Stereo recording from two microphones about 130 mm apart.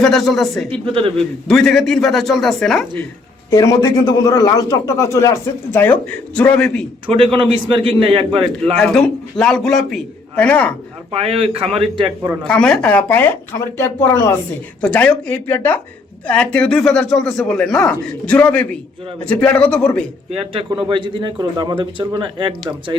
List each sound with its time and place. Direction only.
0.0 s speech: centre (ahead or behind)
0.7 s a man's voice: 45° right (ahead or behind)
1.1 s speech: 5° left (ahead or behind)
3.5 s a man's voice: 25° left (ahead or behind); by 6.7 s 10° left (ahead or behind)
7.7 s a man's voice: 40° right (ahead or behind)
8.7 s a man's voice: 5° left (ahead or behind)
11.1 s a man's voice: 50° right (ahead or behind)
12.5 s a man's voice: 5° left (ahead or behind)
14.8 s a man's voice: 10° left (ahead or behind)
20.8 s speech: 40° right (ahead or behind)